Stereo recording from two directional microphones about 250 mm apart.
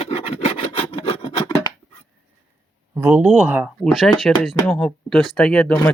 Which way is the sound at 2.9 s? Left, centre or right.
Centre.